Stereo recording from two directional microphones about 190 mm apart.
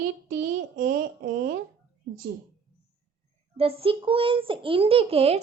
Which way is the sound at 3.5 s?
30° right (ahead or behind).